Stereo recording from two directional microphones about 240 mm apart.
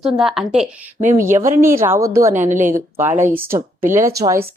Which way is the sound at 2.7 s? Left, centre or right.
Centre.